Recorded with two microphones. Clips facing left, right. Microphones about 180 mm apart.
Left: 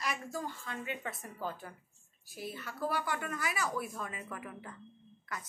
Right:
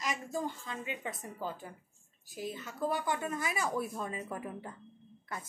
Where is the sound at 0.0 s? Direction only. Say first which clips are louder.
Right 2 dB; 20° right (ahead or behind).